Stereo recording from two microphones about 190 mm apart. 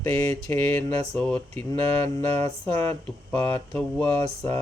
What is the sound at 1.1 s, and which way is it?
Speech, 5° left (ahead or behind).